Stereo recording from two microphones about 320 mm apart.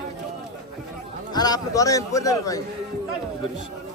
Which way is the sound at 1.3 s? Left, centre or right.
Centre.